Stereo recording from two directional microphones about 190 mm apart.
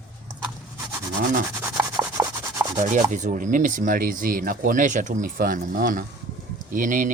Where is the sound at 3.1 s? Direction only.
40° right (ahead or behind).